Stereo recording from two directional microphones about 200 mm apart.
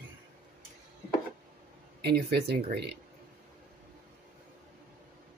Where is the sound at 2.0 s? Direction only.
55° right (ahead or behind).